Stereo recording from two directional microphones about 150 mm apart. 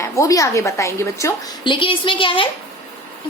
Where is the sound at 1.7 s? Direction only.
35° left (ahead or behind).